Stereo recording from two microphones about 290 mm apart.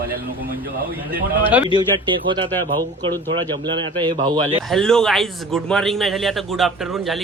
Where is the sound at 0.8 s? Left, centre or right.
Right.